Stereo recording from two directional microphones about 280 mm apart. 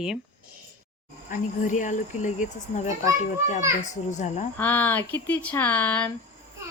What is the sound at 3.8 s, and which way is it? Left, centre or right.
Speech, left.